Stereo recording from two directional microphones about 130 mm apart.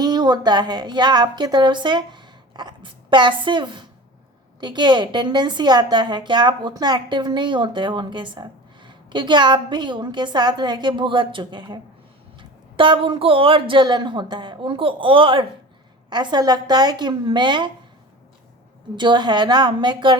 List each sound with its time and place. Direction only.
0.0 s a woman's voice: 30° right (ahead or behind)
18.9 s a woman's voice: 35° right (ahead or behind)